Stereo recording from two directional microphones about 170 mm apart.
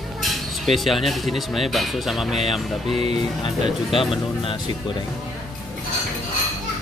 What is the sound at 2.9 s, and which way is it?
Speech, 35° right (ahead or behind).